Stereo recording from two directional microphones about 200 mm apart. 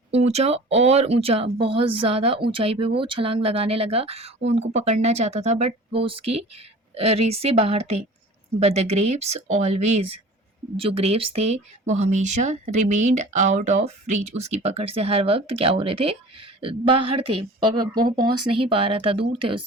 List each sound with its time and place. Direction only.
0.1 s speech: 30° right (ahead or behind)